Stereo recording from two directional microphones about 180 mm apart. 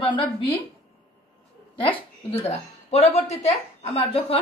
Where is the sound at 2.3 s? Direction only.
35° left (ahead or behind).